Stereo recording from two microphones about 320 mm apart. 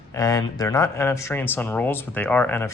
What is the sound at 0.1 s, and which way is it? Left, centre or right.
Speech, centre.